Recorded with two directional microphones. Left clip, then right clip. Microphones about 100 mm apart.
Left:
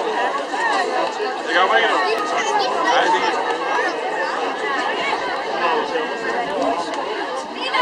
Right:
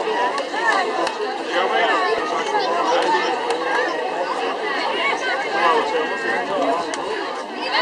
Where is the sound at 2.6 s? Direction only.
25° left (ahead or behind).